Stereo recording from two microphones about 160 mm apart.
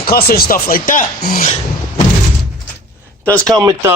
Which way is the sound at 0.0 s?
70° left (ahead or behind).